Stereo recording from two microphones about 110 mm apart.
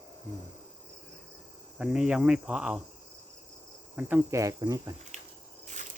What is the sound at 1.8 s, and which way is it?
Speech, 10° right (ahead or behind).